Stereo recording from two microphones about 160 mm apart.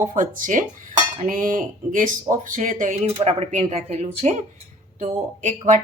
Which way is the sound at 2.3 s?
55° right (ahead or behind).